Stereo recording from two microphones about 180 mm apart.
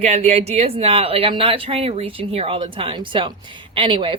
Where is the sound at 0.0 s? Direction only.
35° right (ahead or behind).